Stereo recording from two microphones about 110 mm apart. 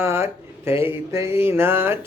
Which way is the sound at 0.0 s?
25° right (ahead or behind).